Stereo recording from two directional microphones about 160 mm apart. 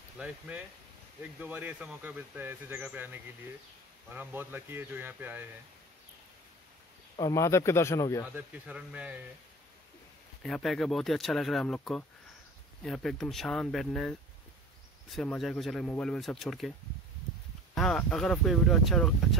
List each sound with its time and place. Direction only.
0.2 s speech: 10° right (ahead or behind)
7.2 s speech: 20° left (ahead or behind)
8.6 s speech: 5° right (ahead or behind)
10.4 s speech: centre (ahead or behind)
15.2 s speech: 5° left (ahead or behind)
17.7 s speech: 5° left (ahead or behind)